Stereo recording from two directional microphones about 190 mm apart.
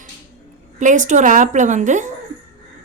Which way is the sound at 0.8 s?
40° right (ahead or behind).